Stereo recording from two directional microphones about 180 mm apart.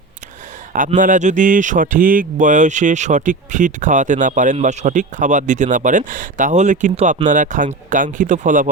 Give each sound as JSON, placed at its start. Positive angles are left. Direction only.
{"t": 0.8, "sound": "speech", "side_deg": -45}